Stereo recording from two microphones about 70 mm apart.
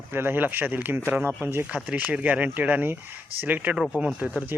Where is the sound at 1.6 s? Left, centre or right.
Centre.